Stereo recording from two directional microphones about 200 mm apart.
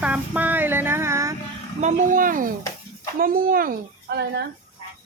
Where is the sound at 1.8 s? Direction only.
40° right (ahead or behind); by 4.4 s 55° right (ahead or behind).